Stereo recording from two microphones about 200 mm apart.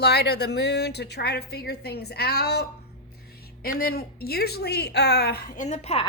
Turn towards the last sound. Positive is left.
turn(degrees=30)  # may be behind; listen again after turning